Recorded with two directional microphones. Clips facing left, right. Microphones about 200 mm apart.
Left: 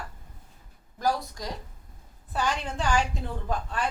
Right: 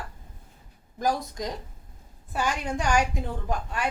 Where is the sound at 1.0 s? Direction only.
20° right (ahead or behind).